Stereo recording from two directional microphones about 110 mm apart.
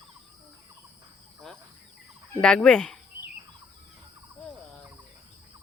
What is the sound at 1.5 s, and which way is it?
Speech, 5° left (ahead or behind).